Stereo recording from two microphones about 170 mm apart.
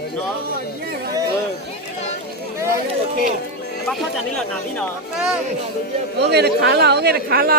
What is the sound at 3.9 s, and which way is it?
Speech, 5° left (ahead or behind).